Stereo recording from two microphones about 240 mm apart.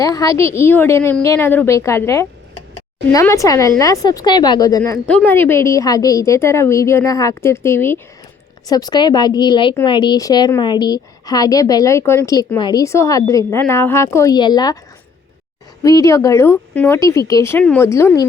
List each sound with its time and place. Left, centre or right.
0.0 s a woman's voice: centre
15.8 s a woman's voice: centre